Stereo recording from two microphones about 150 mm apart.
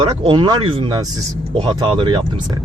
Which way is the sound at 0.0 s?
35° right (ahead or behind).